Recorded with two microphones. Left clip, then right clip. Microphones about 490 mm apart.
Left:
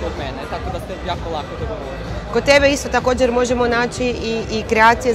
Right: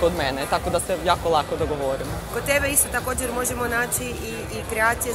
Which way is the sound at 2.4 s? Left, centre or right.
Left.